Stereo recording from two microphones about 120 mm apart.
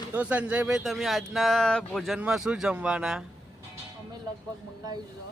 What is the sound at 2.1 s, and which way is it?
A man's voice, 5° right (ahead or behind).